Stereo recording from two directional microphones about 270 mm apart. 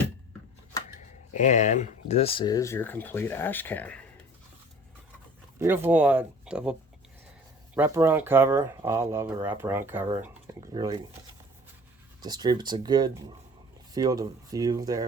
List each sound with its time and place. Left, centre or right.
1.3 s speech: left; by 4.0 s centre
5.5 s speech: centre
7.8 s speech: centre
12.2 s speech: centre